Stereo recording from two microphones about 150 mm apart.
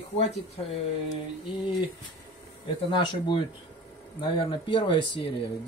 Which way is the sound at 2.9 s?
30° left (ahead or behind).